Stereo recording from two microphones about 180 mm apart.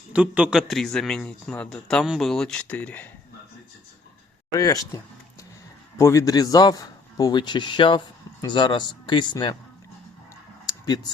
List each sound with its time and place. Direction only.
0.1 s a man's voice: 5° right (ahead or behind)
4.5 s a man's voice: 20° left (ahead or behind)
6.0 s a man's voice: 15° left (ahead or behind)
10.7 s a sound: 20° left (ahead or behind)